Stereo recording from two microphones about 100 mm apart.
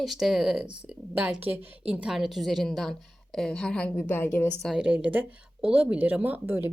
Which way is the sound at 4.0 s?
20° left (ahead or behind).